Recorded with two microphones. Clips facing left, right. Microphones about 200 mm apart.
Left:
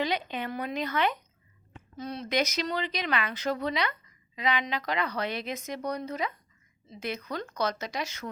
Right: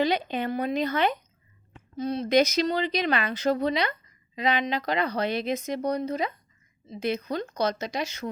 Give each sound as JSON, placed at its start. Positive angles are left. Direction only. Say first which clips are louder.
{"t": 0.0, "sound": "speech", "louder": "right 5 dB", "side_deg": -35}